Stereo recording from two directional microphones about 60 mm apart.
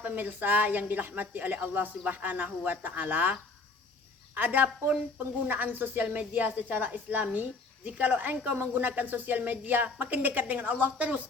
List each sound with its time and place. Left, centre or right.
0.0 s speech: right
4.4 s speech: right